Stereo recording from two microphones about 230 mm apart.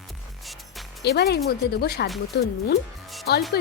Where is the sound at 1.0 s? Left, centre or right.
Left.